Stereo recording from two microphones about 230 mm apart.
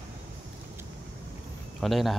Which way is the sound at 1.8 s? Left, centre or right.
Centre.